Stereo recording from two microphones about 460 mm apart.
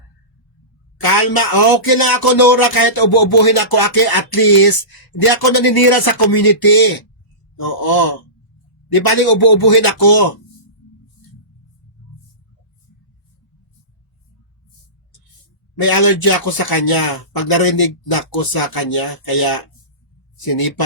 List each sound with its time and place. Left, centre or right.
1.0 s speech: left
9.0 s speech: left
15.8 s speech: left